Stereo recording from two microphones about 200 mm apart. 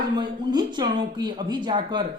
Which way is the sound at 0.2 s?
20° right (ahead or behind).